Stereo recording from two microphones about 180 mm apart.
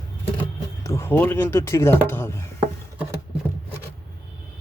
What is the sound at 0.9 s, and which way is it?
Speech, 15° left (ahead or behind).